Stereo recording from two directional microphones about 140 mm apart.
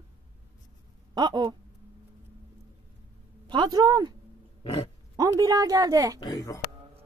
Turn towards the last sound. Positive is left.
turn(degrees=25)  # may be behind; listen again after turning